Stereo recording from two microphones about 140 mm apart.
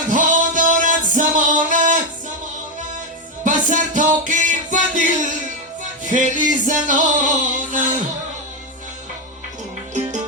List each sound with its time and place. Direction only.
0.1 s music: 65° right (ahead or behind)
3.4 s music: 65° right (ahead or behind)